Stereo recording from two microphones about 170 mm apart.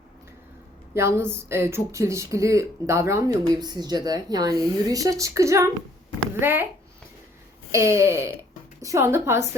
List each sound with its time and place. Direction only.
0.9 s a woman's voice: 15° right (ahead or behind)
7.7 s speech: 15° right (ahead or behind)